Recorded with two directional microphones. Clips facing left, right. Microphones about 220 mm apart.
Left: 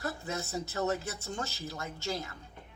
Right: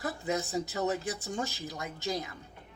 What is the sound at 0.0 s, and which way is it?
Speech, 15° right (ahead or behind).